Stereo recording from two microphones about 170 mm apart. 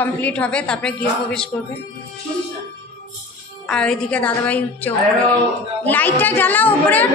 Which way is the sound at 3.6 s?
5° left (ahead or behind).